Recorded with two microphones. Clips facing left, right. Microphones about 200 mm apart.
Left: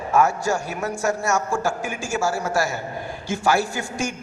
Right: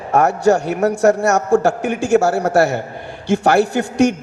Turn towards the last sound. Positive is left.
turn(degrees=-65)  # may be behind; listen again after turning